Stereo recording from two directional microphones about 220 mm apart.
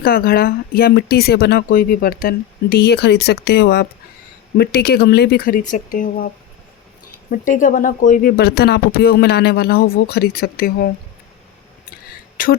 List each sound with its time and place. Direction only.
0.0 s speech: 45° left (ahead or behind)
12.4 s speech: 40° left (ahead or behind)